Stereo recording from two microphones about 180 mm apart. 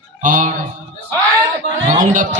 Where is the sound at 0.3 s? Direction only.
45° right (ahead or behind).